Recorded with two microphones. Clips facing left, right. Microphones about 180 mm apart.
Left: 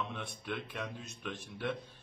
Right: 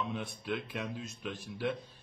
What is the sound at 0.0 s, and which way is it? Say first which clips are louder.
Speech: right 3 dB; centre (ahead or behind).